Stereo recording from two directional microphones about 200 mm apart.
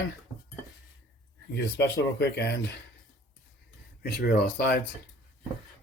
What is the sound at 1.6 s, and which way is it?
Speech, 55° left (ahead or behind).